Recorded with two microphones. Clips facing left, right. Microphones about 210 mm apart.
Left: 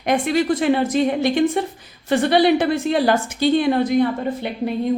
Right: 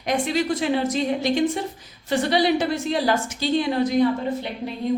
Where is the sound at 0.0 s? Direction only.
55° left (ahead or behind).